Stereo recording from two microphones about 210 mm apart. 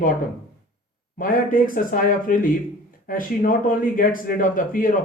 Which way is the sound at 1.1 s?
40° left (ahead or behind).